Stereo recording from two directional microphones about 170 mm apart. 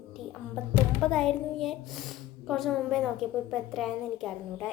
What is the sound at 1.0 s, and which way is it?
Speech, 5° left (ahead or behind).